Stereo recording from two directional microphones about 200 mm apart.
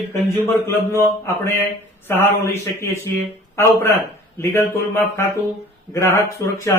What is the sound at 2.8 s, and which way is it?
Speech, 15° left (ahead or behind).